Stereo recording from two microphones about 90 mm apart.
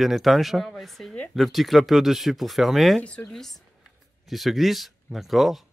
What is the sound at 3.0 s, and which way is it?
Speech, 15° left (ahead or behind).